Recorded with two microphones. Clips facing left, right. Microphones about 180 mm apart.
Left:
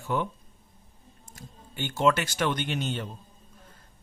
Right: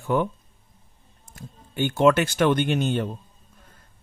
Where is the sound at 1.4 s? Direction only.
55° right (ahead or behind).